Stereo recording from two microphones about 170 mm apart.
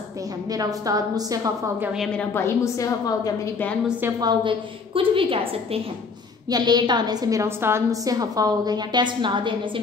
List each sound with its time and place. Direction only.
0.5 s a woman's voice: 20° right (ahead or behind)
2.3 s a woman's voice: 15° left (ahead or behind)
4.2 s a woman's voice: 30° right (ahead or behind)